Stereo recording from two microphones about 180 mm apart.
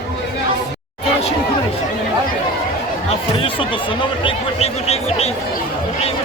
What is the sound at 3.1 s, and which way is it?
Speech, 30° left (ahead or behind).